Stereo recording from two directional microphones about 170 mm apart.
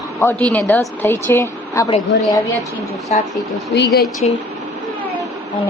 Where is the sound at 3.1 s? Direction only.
40° left (ahead or behind).